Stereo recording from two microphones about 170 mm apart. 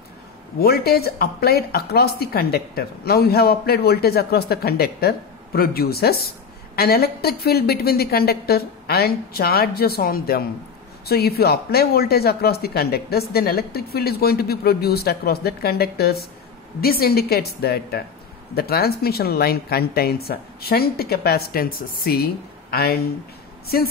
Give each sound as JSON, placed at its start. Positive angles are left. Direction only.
{"t": 0.6, "sound": "speech", "side_deg": 65}